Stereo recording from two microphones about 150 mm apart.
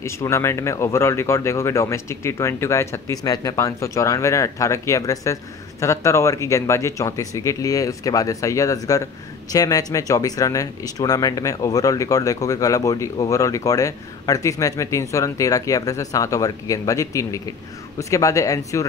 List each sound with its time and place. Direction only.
0.0 s speech: 20° left (ahead or behind)